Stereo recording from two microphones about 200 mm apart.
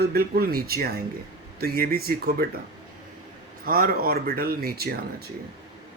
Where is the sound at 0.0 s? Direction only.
50° right (ahead or behind).